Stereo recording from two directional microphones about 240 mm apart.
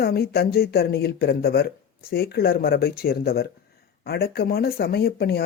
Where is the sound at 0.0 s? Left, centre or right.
Left.